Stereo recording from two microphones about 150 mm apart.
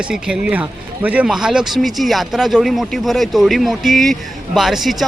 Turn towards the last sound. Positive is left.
turn(degrees=0)  # may be behind; listen again after turning